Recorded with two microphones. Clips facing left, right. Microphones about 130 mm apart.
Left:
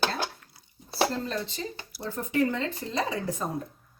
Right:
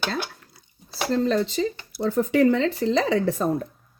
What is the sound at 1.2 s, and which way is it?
Speech, 90° right.